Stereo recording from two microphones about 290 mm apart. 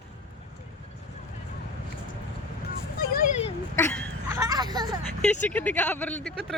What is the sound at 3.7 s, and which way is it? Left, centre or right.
Speech, centre.